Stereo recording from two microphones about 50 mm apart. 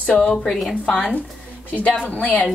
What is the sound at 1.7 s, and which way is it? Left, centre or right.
Speech, left.